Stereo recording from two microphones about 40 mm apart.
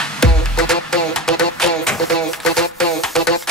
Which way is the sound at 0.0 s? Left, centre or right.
Centre.